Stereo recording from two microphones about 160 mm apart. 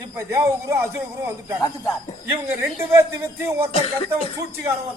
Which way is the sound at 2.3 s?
15° right (ahead or behind).